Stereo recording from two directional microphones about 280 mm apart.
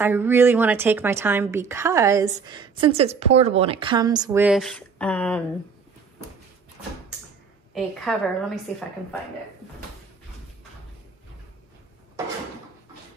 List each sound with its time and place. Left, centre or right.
0.0 s speech: centre
7.7 s a woman's voice: centre